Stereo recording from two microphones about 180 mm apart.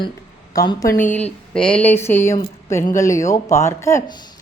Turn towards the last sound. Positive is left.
turn(degrees=15)  # may be behind; listen again after turning